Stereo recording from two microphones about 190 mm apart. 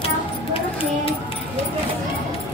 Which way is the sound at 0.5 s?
30° left (ahead or behind).